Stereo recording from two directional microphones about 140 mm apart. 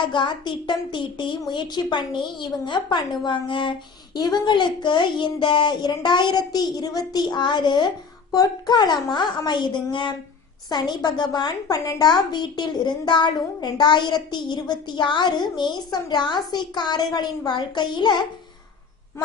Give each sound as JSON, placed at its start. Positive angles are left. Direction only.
{"t": 0.0, "sound": "a woman's voice", "side_deg": 35}